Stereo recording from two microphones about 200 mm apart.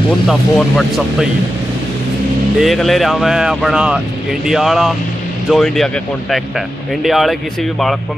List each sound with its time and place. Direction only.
0.3 s speech: centre (ahead or behind)
2.6 s speech: centre (ahead or behind)
7.0 s speech: centre (ahead or behind)